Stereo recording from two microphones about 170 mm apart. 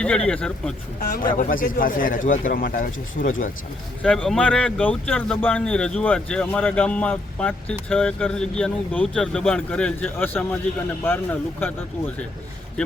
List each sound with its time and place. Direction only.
0.3 s speech: 5° left (ahead or behind)
1.1 s speech: 55° left (ahead or behind)
4.0 s speech: 5° left (ahead or behind)